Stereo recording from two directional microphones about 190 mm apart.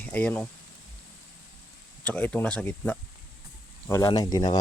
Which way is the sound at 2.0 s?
10° left (ahead or behind).